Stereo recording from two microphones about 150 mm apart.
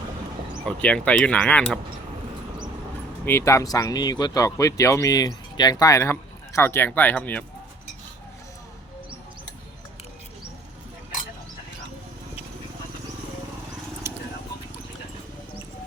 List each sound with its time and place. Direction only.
0.6 s speech: 5° left (ahead or behind)
3.2 s speech: 20° left (ahead or behind)